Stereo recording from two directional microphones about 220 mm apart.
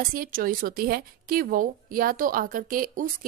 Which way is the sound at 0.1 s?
40° right (ahead or behind).